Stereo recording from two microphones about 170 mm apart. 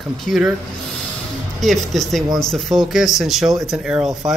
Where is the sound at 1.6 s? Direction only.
Centre (ahead or behind).